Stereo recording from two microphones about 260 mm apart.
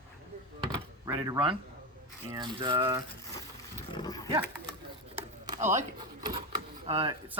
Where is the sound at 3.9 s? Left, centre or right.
Centre.